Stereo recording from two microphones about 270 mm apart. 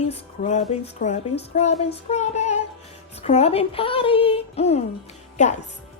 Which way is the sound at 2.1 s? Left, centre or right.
Left.